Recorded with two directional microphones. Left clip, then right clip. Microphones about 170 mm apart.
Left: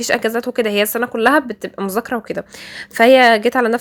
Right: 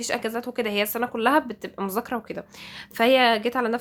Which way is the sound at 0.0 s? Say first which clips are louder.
Left 10 dB; 40° left (ahead or behind).